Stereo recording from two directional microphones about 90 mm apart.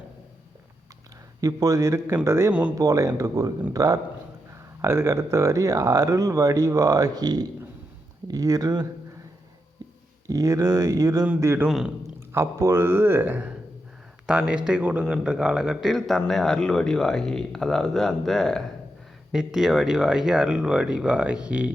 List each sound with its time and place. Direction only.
1.4 s speech: 40° right (ahead or behind)
2.5 s speech: 15° right (ahead or behind)
2.7 s speech: 40° right (ahead or behind)
4.8 s speech: 30° right (ahead or behind); by 8.9 s 45° right (ahead or behind)
10.2 s speech: 35° right (ahead or behind)
11.3 s speech: 25° right (ahead or behind)
14.3 s speech: 10° right (ahead or behind)